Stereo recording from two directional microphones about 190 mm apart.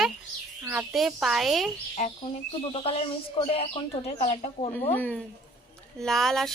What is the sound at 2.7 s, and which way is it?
Speech, 30° left (ahead or behind).